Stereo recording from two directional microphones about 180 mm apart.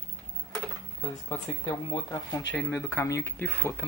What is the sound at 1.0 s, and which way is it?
Speech, 10° left (ahead or behind).